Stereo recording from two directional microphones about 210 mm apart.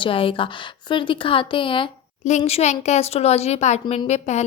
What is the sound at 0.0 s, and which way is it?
A woman's voice, 25° left (ahead or behind).